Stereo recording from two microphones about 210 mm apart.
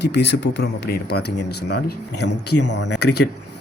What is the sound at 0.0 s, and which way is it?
Speech, 55° left (ahead or behind).